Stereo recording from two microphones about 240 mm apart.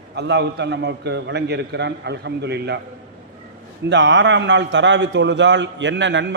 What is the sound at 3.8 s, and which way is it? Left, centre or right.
A man's voice, right.